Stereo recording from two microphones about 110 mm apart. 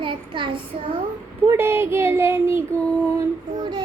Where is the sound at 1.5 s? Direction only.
20° right (ahead or behind).